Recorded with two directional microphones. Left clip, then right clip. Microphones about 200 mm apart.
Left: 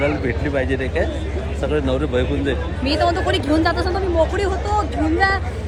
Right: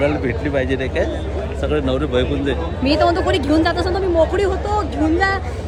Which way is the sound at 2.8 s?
35° right (ahead or behind).